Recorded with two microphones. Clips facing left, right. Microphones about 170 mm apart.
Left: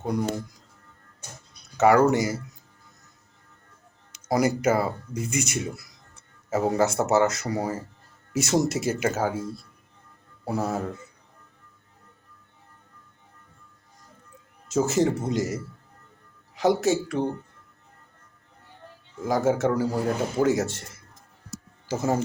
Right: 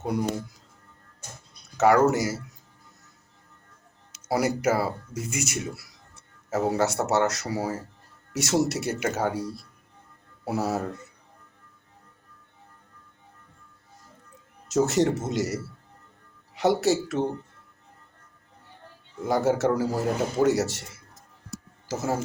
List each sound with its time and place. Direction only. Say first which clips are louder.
0.0 s speech: even; 10° right (ahead or behind)
1.8 s speech: left 1 dB; centre (ahead or behind)
4.3 s speech: left 2 dB; 5° right (ahead or behind)
10.4 s speech: even; 5° right (ahead or behind)
14.7 s speech: even; centre (ahead or behind)
15.3 s a man's voice: left 1 dB; 80° right
16.6 s speech: even; centre (ahead or behind)
19.2 s speech: even; centre (ahead or behind)
21.9 s speech: left 3 dB; 5° right (ahead or behind)